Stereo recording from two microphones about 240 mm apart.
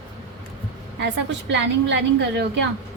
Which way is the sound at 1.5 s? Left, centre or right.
Right.